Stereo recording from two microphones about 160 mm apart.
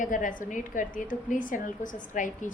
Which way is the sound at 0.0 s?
55° left (ahead or behind).